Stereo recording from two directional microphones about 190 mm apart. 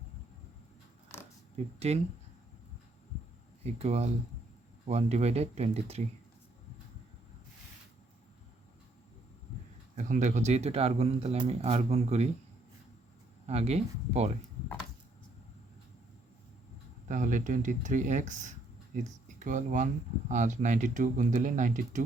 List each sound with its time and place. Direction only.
1.5 s speech: 35° right (ahead or behind)
3.6 s speech: 35° right (ahead or behind)
9.9 s speech: 40° right (ahead or behind)
13.5 s speech: 35° right (ahead or behind)
17.1 s speech: 40° right (ahead or behind)